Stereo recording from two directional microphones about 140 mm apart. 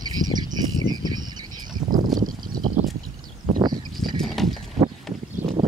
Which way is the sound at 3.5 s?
30° right (ahead or behind).